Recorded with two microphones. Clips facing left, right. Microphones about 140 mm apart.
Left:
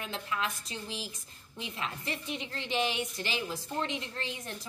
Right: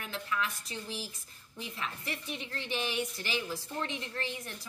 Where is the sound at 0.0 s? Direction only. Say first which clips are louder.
Left 1 dB; 25° left (ahead or behind).